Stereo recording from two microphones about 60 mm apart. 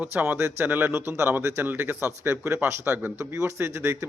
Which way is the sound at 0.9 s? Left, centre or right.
Right.